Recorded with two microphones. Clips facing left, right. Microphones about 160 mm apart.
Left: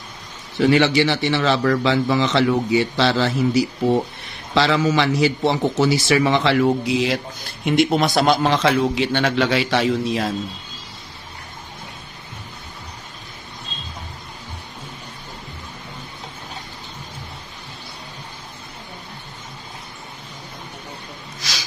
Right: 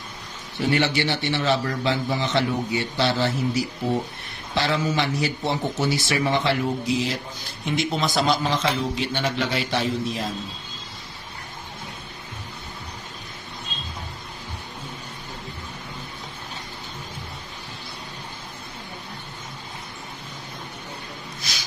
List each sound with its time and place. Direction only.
0.6 s speech: 90° left; by 7.2 s 70° left (ahead or behind)
7.6 s a man's voice: 60° left (ahead or behind); by 10.3 s 80° left
21.4 s snort: 90° left